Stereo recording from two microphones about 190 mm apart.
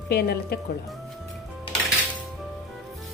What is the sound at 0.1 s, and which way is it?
Speech, 55° left (ahead or behind).